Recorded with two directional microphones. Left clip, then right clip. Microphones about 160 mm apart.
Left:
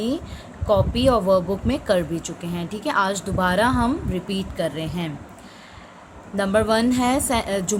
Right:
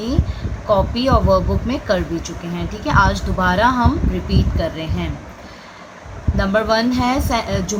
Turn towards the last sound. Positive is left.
turn(degrees=65)  # may be behind; listen again after turning